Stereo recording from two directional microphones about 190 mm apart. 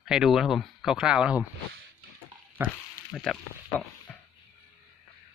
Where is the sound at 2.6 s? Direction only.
10° right (ahead or behind).